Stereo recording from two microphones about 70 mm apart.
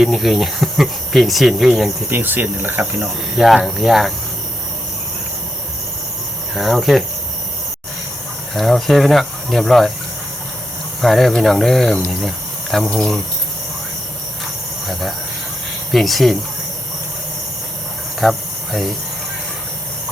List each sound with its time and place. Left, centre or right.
0.0 s speech: centre
2.0 s speech: right
3.0 s speech: centre
6.5 s speech: centre
8.5 s speech: centre
11.0 s speech: centre
15.9 s speech: centre
18.2 s cricket: centre